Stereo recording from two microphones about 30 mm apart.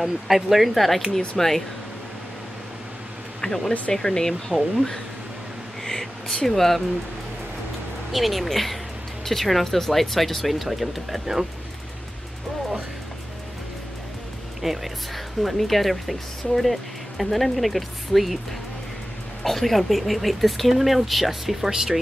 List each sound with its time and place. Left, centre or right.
0.0 s speech: centre
0.7 s speech: centre
3.3 s speech: centre
5.9 s a sound: centre
8.1 s speech: centre
14.6 s speech: centre
19.4 s speech: centre